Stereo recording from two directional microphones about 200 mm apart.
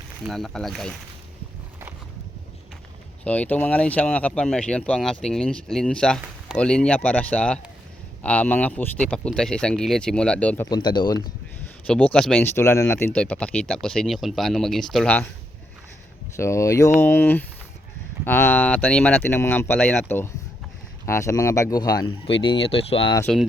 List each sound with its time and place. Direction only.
0.3 s speech: centre (ahead or behind)
3.2 s speech: 10° left (ahead or behind)
10.7 s speech: 20° left (ahead or behind)
11.9 s speech: 5° left (ahead or behind)
16.4 s speech: 15° left (ahead or behind)
23.2 s speech: centre (ahead or behind)